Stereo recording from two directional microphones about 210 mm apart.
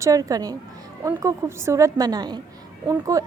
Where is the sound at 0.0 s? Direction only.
15° right (ahead or behind).